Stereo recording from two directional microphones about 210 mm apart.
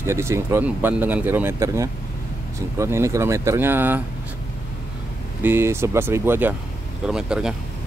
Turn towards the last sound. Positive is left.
turn(degrees=-5)  # may be behind; listen again after turning